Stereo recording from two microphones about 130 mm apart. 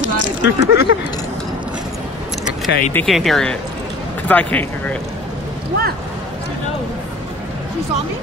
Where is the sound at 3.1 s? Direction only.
Centre (ahead or behind).